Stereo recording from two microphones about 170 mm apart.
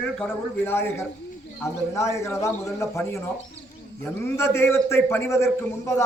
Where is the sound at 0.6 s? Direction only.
15° left (ahead or behind).